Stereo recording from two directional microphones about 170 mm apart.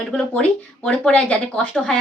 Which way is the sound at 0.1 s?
5° left (ahead or behind).